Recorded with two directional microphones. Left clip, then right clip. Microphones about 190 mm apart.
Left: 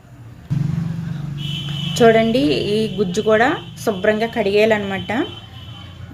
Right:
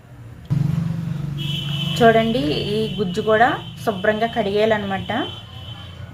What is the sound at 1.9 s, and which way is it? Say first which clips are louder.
A woman's voice: left 2 dB; 35° left (ahead or behind).